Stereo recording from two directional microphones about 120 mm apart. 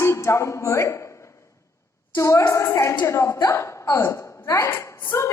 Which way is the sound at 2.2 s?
25° left (ahead or behind).